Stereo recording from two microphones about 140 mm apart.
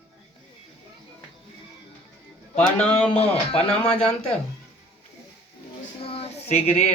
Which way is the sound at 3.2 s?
45° left (ahead or behind).